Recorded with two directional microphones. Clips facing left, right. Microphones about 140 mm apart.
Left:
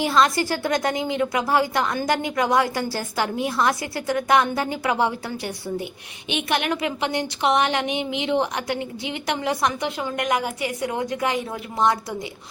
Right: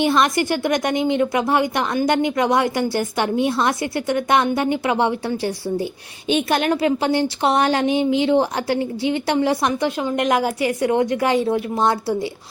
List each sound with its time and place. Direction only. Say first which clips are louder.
0.0 s a woman's voice: right 2 dB; 20° right (ahead or behind)
6.2 s a woman's voice: right 6 dB; 35° right (ahead or behind)